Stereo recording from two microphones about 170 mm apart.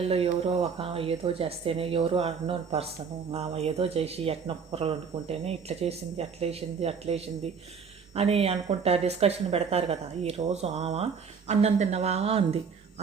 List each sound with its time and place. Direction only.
0.4 s speech: 35° right (ahead or behind)